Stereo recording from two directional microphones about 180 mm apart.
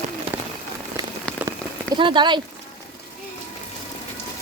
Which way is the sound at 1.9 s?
25° right (ahead or behind).